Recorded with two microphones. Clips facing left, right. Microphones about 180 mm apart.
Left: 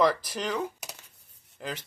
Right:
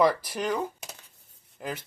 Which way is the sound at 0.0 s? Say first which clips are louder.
Right 1 dB; 5° right (ahead or behind).